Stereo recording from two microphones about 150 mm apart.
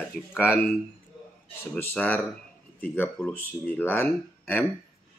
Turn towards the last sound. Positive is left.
turn(degrees=10)  # may be behind; listen again after turning